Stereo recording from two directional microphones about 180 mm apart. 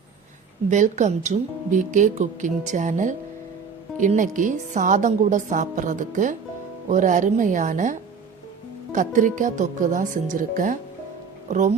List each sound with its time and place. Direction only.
0.7 s speech: 40° right (ahead or behind)